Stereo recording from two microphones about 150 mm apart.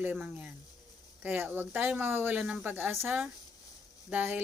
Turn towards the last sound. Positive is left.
turn(degrees=-10)  # may be behind; listen again after turning